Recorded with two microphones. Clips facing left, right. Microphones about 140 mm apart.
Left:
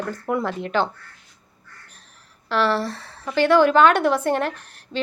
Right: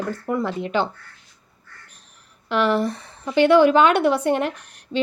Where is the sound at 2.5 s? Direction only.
15° right (ahead or behind).